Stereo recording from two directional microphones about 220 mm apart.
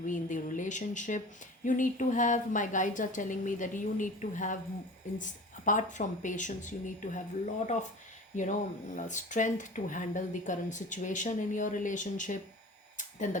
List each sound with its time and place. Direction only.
0.0 s speech: 35° left (ahead or behind)
9.0 s speech: 35° left (ahead or behind)
13.0 s a sound: 35° left (ahead or behind)